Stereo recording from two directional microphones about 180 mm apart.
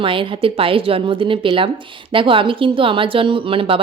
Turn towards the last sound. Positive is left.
turn(degrees=-30)  # may be behind; listen again after turning